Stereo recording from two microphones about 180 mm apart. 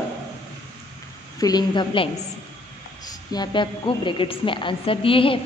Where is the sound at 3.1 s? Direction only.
20° left (ahead or behind).